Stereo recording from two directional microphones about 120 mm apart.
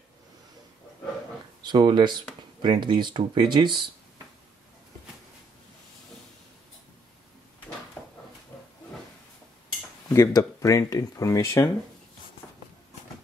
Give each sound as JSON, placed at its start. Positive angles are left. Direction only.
{"t": 1.6, "sound": "speech", "side_deg": -40}
{"t": 8.0, "sound": "a sound", "side_deg": 15}
{"t": 10.0, "sound": "speech", "side_deg": 25}